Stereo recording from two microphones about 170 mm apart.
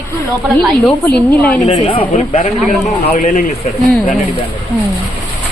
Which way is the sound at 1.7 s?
30° left (ahead or behind).